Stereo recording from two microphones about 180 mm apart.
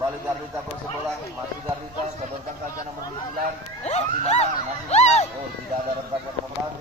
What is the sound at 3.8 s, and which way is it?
Speech, 40° left (ahead or behind).